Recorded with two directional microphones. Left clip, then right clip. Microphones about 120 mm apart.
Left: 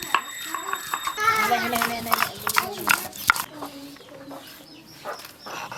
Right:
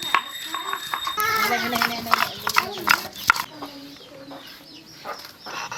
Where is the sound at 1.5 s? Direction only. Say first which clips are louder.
Even; 30° left (ahead or behind).